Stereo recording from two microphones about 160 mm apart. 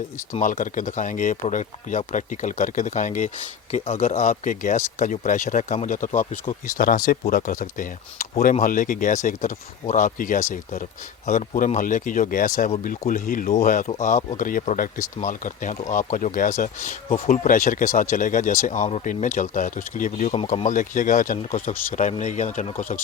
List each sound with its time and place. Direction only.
0.4 s speech: 55° left (ahead or behind)